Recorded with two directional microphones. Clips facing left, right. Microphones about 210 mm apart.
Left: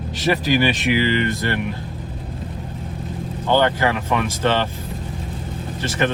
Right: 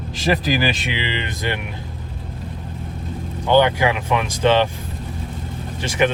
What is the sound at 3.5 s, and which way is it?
Speech, 15° right (ahead or behind).